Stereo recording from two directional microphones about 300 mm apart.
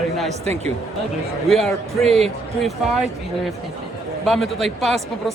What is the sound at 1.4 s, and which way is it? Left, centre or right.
Speech, centre.